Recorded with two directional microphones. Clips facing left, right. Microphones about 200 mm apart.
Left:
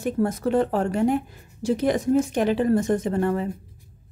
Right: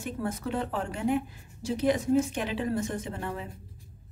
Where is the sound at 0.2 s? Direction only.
40° left (ahead or behind).